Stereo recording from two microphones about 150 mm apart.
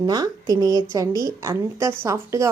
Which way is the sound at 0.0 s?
25° right (ahead or behind).